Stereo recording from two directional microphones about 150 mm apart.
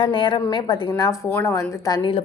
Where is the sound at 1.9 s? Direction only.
35° left (ahead or behind).